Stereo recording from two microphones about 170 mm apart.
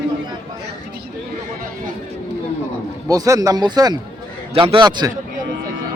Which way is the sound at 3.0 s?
20° right (ahead or behind).